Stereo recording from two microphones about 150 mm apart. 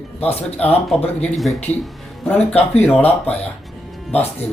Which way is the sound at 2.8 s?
10° left (ahead or behind).